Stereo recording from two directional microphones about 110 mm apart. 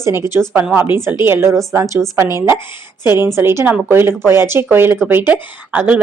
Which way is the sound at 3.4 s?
20° right (ahead or behind).